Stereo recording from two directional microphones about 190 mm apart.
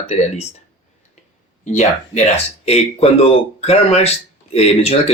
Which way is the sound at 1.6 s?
40° left (ahead or behind).